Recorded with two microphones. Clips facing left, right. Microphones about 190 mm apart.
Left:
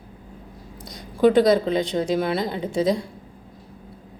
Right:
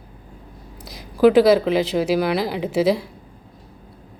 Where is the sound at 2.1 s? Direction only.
80° right.